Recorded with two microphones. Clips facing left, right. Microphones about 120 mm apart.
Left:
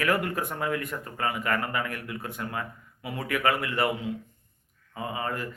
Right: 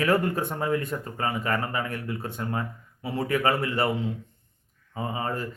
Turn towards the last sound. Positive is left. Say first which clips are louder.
# right 2 dB
turn(degrees=-30)  # may be behind; listen again after turning